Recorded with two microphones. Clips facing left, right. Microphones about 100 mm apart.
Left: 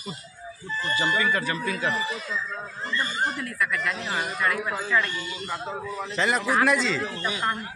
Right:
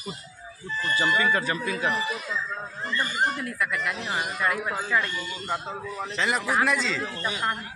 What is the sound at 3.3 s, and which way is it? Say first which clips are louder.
Speech: left 1 dB; 20° right (ahead or behind).